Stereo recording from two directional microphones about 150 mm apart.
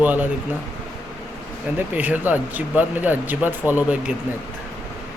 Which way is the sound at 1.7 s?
10° right (ahead or behind).